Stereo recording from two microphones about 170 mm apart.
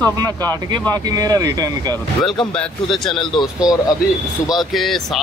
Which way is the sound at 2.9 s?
Centre (ahead or behind).